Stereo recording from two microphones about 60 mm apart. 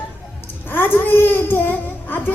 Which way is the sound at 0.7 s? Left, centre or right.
Left.